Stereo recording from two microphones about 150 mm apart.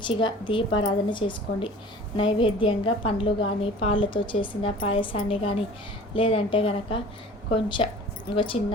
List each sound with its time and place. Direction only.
0.0 s a woman's voice: 30° left (ahead or behind)